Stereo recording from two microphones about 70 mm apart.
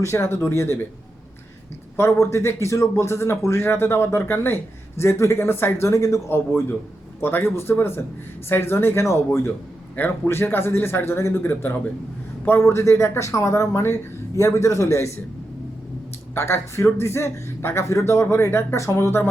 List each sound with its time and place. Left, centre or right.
0.0 s a man's voice: left
2.0 s a man's voice: left
6.3 s a man's voice: left
9.9 s a man's voice: left
16.3 s a man's voice: left